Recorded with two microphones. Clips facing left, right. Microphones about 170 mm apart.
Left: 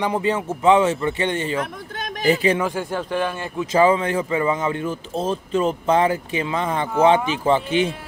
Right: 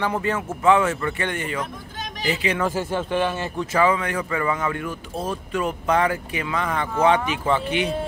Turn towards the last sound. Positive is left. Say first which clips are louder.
# left 4 dB
turn(degrees=30)  # may be behind; listen again after turning